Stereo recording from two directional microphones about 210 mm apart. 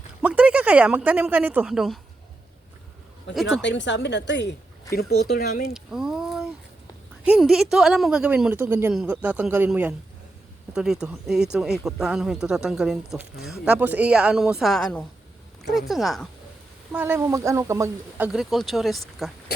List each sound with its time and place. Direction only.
0.2 s speech: 5° right (ahead or behind)
3.5 s a woman's voice: 60° left (ahead or behind)
5.7 s speech: centre (ahead or behind)
18.3 s speech: centre (ahead or behind)
19.5 s speech: 50° left (ahead or behind)